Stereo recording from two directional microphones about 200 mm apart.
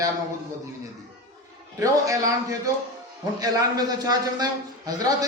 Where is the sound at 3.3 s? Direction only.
20° right (ahead or behind).